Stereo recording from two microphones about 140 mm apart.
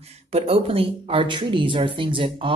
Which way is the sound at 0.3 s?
45° right (ahead or behind).